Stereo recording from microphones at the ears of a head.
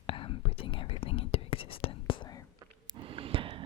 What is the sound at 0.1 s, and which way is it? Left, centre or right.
Whispering, left.